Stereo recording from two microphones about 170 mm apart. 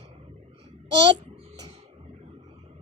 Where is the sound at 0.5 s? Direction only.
35° right (ahead or behind).